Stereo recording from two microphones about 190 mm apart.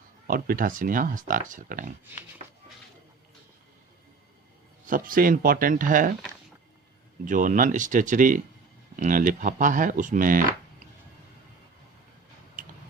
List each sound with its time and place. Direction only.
0.3 s speech: 50° right (ahead or behind)
4.9 s speech: 45° right (ahead or behind)
7.3 s speech: 45° right (ahead or behind)